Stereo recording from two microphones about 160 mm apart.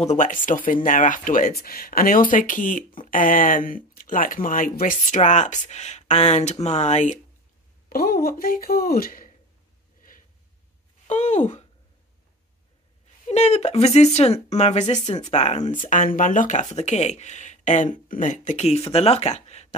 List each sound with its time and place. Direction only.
0.0 s speech: 50° left (ahead or behind)
1.6 s speech: 70° left (ahead or behind); by 7.2 s 50° left (ahead or behind)
7.9 s speech: 70° left (ahead or behind)
10.0 s snort: 60° left (ahead or behind)
11.1 s speech: 45° left (ahead or behind)
13.3 s speech: 40° left (ahead or behind)